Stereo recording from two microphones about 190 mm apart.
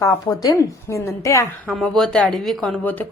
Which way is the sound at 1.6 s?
Centre (ahead or behind).